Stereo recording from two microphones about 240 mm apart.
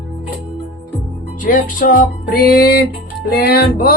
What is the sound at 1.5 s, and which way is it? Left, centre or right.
Speech, left.